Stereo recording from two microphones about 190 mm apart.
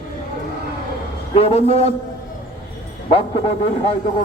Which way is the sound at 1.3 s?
30° left (ahead or behind).